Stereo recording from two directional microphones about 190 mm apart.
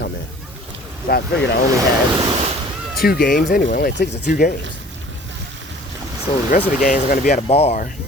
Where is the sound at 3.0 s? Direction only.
55° left (ahead or behind).